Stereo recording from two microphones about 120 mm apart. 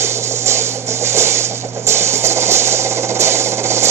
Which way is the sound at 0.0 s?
20° right (ahead or behind).